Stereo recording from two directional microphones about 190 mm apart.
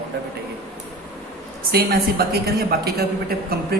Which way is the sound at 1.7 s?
55° right (ahead or behind).